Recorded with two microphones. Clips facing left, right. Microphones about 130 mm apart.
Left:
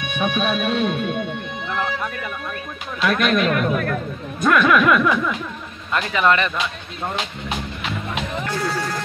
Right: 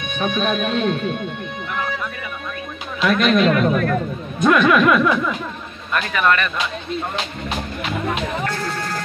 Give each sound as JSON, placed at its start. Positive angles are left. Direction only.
{"t": 0.1, "sound": "speech", "side_deg": 10}
{"t": 3.0, "sound": "speech", "side_deg": 0}
{"t": 5.9, "sound": "speech", "side_deg": 20}